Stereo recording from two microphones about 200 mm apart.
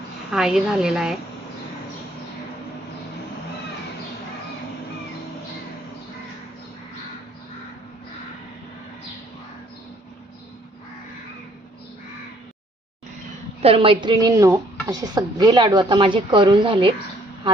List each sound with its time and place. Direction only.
0.3 s a woman's voice: centre (ahead or behind)
13.6 s speech: 30° right (ahead or behind)